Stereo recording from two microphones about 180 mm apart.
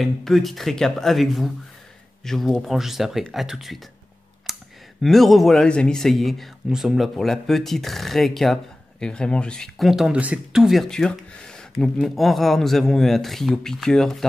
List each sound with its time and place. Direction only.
0.0 s speech: centre (ahead or behind)
4.5 s clicking: centre (ahead or behind)
5.0 s speech: centre (ahead or behind)